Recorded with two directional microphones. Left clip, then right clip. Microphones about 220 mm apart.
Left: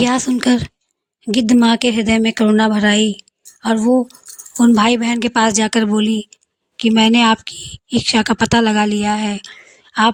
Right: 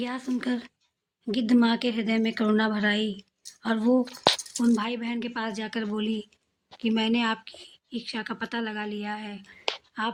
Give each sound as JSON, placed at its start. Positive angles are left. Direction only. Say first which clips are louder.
{"t": 0.0, "sound": "speech", "louder": "left 15 dB", "side_deg": 40}
{"t": 4.5, "sound": "speech", "louder": "left 14 dB", "side_deg": 45}